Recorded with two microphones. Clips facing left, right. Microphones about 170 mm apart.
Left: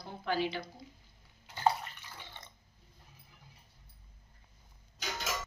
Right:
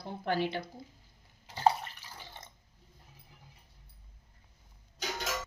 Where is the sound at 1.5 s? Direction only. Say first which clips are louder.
Right 3 dB; 35° right (ahead or behind).